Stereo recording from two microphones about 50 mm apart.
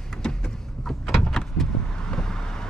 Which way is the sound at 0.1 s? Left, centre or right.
Centre.